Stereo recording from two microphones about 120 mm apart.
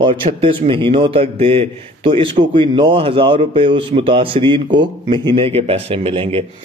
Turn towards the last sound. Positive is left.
turn(degrees=-50)  # may be behind; listen again after turning